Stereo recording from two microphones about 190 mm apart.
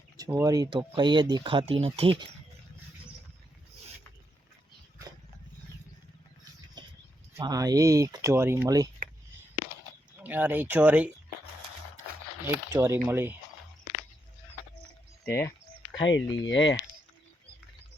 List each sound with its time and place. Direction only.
0.3 s speech: 15° right (ahead or behind)
7.3 s speech: 20° right (ahead or behind)
10.2 s speech: 10° right (ahead or behind)
12.7 s speech: 10° right (ahead or behind)
15.3 s a sound: 15° left (ahead or behind)
16.2 s speech: 20° left (ahead or behind)
16.5 s speech: 70° left (ahead or behind)